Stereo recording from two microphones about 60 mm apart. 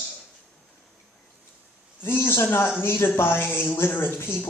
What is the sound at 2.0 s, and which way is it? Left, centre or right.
A man's voice, left.